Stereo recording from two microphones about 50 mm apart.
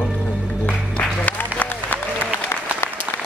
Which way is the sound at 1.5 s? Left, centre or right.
Left.